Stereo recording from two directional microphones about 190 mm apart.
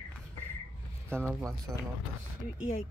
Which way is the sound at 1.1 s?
10° right (ahead or behind).